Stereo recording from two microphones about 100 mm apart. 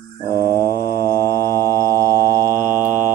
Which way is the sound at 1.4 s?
30° left (ahead or behind).